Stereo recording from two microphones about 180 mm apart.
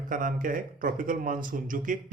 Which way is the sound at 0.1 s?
50° right (ahead or behind).